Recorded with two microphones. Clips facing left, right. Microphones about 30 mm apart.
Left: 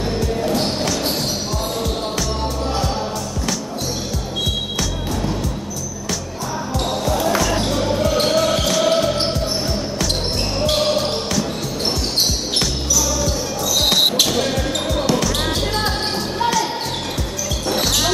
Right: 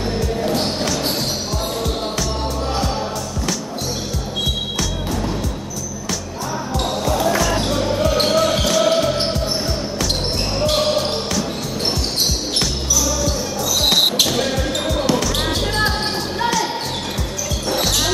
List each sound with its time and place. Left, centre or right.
0.2 s music: centre
7.2 s music: centre
8.3 s basketball bounce: centre
10.9 s basketball bounce: centre
13.7 s music: centre
15.1 s basketball bounce: centre
17.6 s music: centre